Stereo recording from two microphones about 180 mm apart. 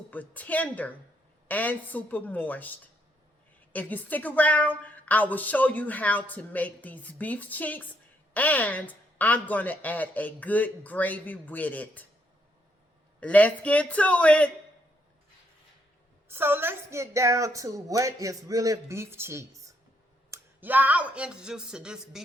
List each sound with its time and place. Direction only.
0.1 s a woman's voice: 10° left (ahead or behind)
13.1 s a woman's voice: 10° left (ahead or behind)
16.3 s a woman's voice: 10° right (ahead or behind)